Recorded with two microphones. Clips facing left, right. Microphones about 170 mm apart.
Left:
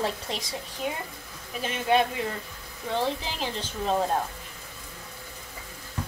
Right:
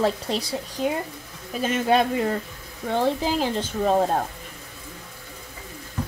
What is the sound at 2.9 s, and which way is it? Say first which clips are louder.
Speech: right 6 dB; 45° right (ahead or behind).